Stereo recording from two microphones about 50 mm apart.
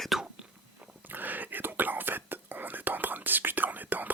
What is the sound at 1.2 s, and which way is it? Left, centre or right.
Whispering, right.